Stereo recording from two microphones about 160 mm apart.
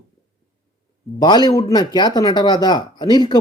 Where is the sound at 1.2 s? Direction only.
25° left (ahead or behind).